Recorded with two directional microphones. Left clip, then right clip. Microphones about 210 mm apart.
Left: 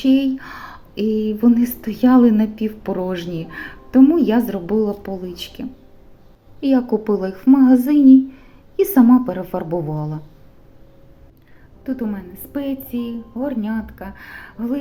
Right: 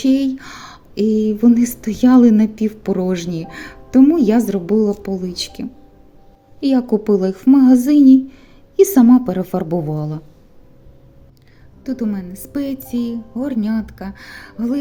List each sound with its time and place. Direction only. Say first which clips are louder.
0.0 s a woman's voice: even; 50° right (ahead or behind)
6.6 s speech: right 1 dB; 60° right (ahead or behind)
6.9 s a woman's voice: right 4 dB; 45° right (ahead or behind)
11.9 s speech: right 2 dB; 60° right (ahead or behind)